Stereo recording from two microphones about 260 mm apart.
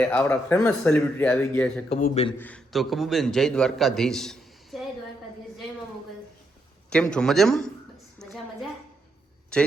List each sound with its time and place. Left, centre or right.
0.0 s speech: centre
1.9 s a man's voice: left
2.4 s a man's voice: centre
6.9 s speech: centre
8.2 s a sound: centre
9.5 s speech: centre